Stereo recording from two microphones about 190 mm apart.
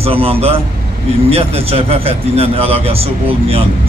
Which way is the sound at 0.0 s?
30° right (ahead or behind).